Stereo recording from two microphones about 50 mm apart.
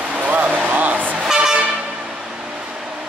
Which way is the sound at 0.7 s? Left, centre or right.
Right.